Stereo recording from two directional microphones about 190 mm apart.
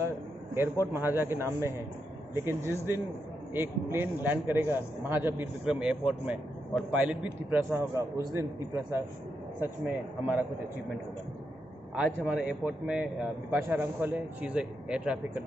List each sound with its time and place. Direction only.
0.9 s a man's voice: 10° right (ahead or behind)
12.3 s a man's voice: 5° right (ahead or behind)